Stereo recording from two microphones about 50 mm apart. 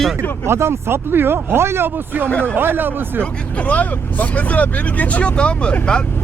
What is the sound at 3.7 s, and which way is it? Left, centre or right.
Speech, left.